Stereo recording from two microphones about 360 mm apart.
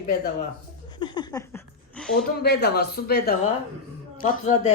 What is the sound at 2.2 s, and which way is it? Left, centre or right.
Speech, left.